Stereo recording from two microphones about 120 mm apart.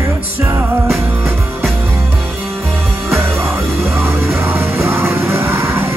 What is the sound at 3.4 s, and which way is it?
Music, 20° right (ahead or behind).